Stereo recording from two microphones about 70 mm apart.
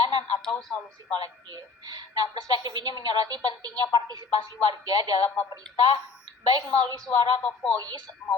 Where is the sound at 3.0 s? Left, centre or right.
Right.